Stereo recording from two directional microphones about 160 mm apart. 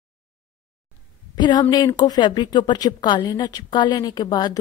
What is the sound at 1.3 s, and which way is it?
A woman's voice, 25° left (ahead or behind).